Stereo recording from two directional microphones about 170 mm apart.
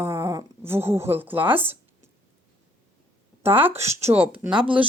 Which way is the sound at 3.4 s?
10° right (ahead or behind).